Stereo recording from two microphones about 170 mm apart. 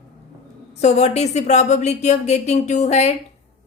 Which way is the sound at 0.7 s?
40° left (ahead or behind).